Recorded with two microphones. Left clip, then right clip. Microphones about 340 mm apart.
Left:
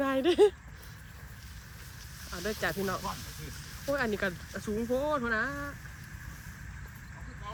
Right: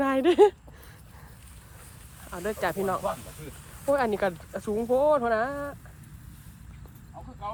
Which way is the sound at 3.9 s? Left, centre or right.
Centre.